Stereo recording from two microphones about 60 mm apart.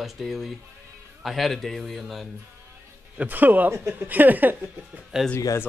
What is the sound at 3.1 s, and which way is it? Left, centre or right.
Speech, right.